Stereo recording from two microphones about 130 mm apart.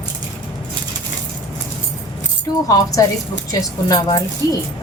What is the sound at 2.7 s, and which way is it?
A woman's voice, 30° left (ahead or behind).